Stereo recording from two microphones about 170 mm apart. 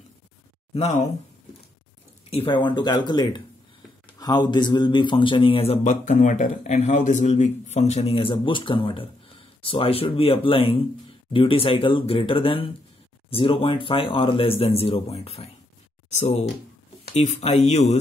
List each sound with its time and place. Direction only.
2.3 s a man's voice: 30° left (ahead or behind)